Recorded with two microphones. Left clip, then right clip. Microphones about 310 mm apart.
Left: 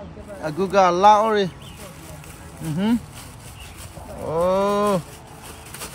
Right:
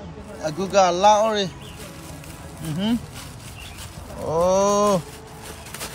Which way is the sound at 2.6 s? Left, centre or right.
Centre.